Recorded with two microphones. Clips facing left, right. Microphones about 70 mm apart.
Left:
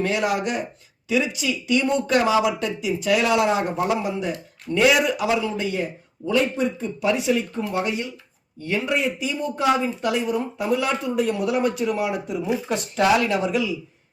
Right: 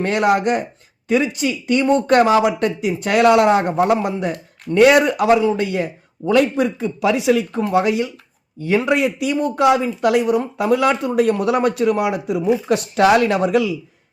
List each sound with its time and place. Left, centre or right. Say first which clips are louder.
0.0 s speech: right 6 dB; right
5.5 s speech: right 4 dB; right